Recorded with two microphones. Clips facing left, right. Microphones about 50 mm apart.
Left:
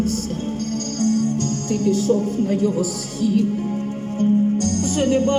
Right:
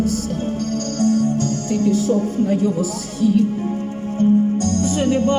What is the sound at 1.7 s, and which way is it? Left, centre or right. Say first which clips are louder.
Speech: even; left.